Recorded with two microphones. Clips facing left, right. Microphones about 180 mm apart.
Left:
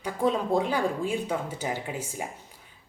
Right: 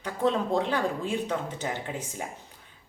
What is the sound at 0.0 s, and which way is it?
A woman's voice, 10° left (ahead or behind).